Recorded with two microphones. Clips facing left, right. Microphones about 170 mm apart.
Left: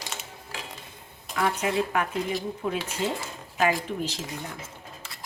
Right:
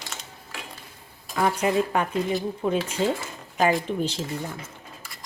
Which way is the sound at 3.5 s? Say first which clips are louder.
Right 3 dB; 35° right (ahead or behind).